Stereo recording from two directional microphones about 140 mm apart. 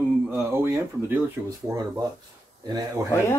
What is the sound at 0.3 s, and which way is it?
Speech, 15° right (ahead or behind).